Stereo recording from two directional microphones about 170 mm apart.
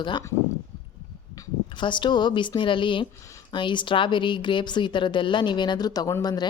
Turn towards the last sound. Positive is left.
turn(degrees=25)  # may be behind; listen again after turning